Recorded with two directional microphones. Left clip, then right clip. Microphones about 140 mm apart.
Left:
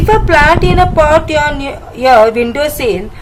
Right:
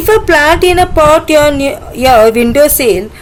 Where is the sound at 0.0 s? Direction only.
50° right (ahead or behind).